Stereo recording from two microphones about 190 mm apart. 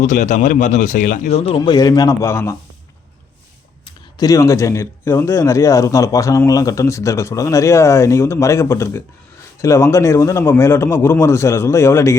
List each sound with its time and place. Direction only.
0.0 s speech: 40° left (ahead or behind); by 2.6 s 15° left (ahead or behind)
3.8 s speech: 20° left (ahead or behind)